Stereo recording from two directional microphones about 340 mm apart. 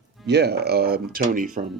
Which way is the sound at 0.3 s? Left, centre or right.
Right.